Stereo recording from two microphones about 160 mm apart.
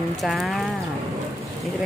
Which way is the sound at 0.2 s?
Centre (ahead or behind).